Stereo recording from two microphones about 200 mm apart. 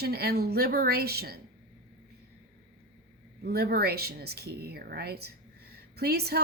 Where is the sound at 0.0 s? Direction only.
50° right (ahead or behind).